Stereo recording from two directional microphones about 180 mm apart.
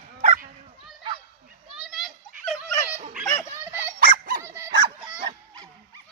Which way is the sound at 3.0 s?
45° right (ahead or behind).